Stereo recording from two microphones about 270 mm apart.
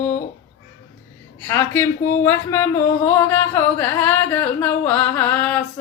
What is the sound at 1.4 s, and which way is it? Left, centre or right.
Speech, centre.